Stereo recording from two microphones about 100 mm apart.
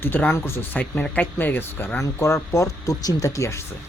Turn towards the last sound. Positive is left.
turn(degrees=30)  # may be behind; listen again after turning